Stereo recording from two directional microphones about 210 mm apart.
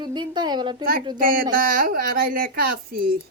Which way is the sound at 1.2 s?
45° right (ahead or behind).